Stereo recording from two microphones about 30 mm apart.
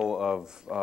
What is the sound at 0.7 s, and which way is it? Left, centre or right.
Speech, centre.